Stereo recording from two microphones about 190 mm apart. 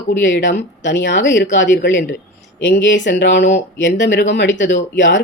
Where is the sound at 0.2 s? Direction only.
70° left (ahead or behind).